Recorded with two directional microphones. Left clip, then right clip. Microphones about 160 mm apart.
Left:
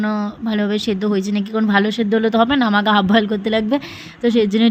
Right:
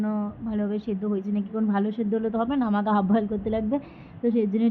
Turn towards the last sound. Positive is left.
turn(degrees=35)  # may be behind; listen again after turning